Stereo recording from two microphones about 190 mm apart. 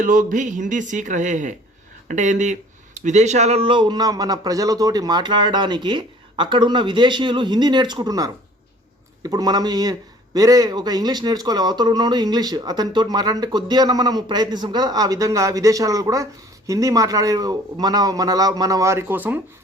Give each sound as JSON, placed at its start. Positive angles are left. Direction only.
{"t": 0.0, "sound": "speech", "side_deg": -45}